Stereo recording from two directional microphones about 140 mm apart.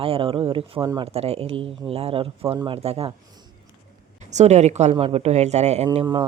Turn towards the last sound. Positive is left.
turn(degrees=-30)  # may be behind; listen again after turning